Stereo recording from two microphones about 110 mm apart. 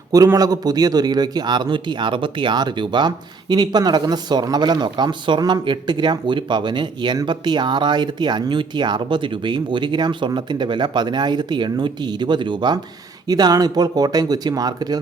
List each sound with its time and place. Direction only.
0.3 s speech: 35° right (ahead or behind)